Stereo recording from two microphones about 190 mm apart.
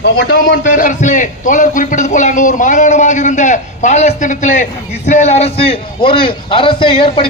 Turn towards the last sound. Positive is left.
turn(degrees=30)  # may be behind; listen again after turning